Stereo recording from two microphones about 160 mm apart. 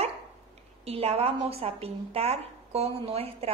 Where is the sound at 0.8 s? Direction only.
40° right (ahead or behind).